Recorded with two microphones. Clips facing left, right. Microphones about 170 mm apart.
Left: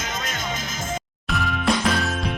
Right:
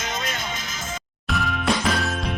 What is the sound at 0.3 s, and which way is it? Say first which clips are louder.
Music: left 1 dB; 45° left (ahead or behind).